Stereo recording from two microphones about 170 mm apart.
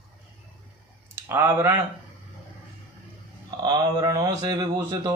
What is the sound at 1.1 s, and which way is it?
Speech, 10° right (ahead or behind).